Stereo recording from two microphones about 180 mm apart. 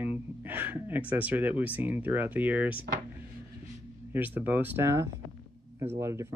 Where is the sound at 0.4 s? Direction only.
10° right (ahead or behind).